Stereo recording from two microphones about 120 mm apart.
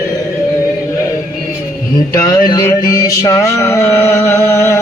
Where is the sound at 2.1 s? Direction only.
30° left (ahead or behind).